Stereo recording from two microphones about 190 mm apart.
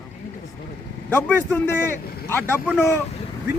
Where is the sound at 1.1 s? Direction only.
10° left (ahead or behind).